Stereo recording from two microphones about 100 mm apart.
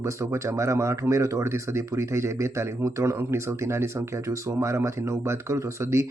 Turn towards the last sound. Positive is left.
turn(degrees=-30)  # may be behind; listen again after turning